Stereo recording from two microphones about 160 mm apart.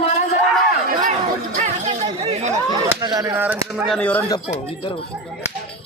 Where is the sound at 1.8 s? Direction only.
40° right (ahead or behind).